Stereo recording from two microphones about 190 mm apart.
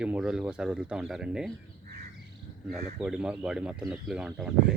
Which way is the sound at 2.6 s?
5° right (ahead or behind).